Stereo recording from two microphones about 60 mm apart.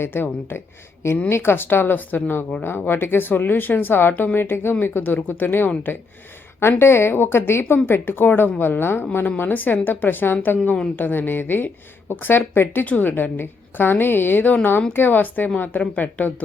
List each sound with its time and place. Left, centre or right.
0.0 s a woman's voice: left